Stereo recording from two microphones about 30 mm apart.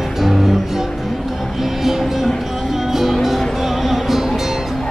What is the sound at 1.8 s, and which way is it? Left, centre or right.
Cattle, centre.